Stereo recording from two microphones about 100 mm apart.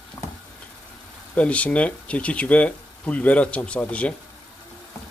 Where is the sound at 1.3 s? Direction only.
15° left (ahead or behind).